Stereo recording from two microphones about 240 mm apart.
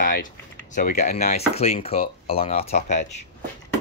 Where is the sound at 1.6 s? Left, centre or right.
Left.